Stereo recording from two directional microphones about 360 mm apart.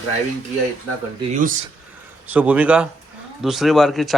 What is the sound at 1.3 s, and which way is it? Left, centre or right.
Speech, right.